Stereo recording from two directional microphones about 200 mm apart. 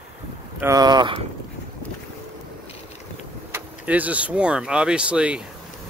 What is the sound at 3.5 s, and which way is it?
Speech, 10° right (ahead or behind).